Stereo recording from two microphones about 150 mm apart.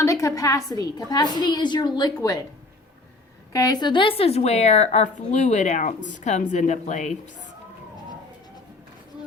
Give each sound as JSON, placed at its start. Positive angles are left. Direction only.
{"t": 0.0, "sound": "a woman's voice", "side_deg": 20}
{"t": 3.5, "sound": "speech", "side_deg": 25}